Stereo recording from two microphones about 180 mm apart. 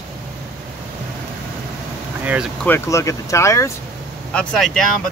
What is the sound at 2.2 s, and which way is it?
Speech, 10° right (ahead or behind).